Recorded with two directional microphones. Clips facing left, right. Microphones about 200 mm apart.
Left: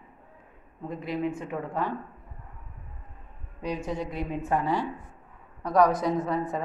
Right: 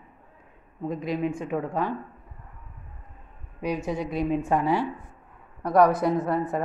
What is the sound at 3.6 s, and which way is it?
A woman's voice, 10° right (ahead or behind).